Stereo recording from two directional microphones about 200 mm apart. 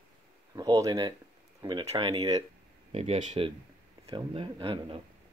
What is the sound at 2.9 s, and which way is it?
Speech, 30° right (ahead or behind).